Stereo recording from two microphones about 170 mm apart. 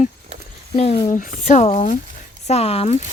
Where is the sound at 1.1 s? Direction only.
50° left (ahead or behind).